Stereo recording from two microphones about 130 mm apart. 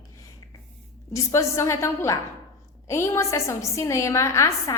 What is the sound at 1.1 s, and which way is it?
A woman's voice, 25° left (ahead or behind).